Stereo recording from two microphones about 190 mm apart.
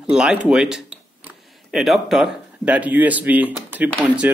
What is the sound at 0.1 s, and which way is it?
Speech, 5° right (ahead or behind).